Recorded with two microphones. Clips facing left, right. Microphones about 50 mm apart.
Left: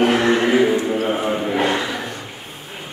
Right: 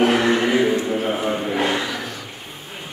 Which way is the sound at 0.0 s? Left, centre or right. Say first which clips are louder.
Left 1 dB; centre.